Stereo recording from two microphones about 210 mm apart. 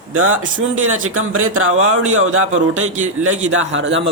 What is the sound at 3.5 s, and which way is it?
Speech, 70° right (ahead or behind).